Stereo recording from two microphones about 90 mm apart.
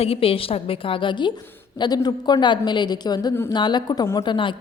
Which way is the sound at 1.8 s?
50° left (ahead or behind).